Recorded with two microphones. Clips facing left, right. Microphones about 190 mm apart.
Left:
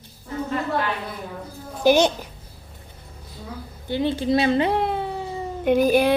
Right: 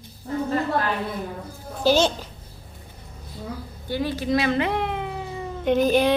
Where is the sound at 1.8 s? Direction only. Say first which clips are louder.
Left 2 dB; 15° left (ahead or behind).